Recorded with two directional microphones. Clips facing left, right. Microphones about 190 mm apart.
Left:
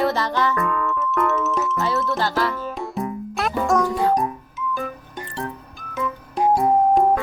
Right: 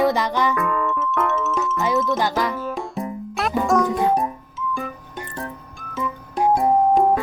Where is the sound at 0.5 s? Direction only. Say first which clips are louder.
Right 1 dB; centre (ahead or behind).